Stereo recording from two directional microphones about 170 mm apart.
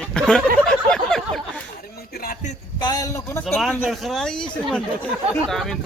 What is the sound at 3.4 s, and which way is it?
Speech, centre (ahead or behind).